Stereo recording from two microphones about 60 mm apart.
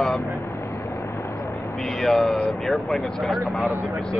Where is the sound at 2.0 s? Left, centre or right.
Centre.